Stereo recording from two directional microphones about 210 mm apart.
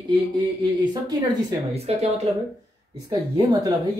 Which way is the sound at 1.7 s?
30° right (ahead or behind).